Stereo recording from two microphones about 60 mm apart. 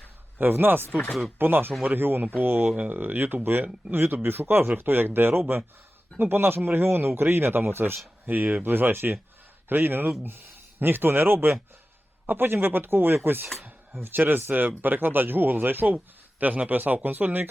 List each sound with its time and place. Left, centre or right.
0.3 s speech: right